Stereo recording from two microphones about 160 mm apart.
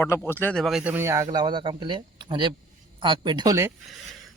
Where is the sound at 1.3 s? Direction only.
30° right (ahead or behind).